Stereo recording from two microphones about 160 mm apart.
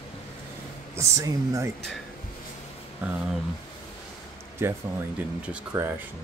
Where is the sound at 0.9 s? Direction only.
20° right (ahead or behind).